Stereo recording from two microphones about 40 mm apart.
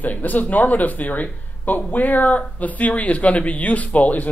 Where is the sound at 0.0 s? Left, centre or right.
Left.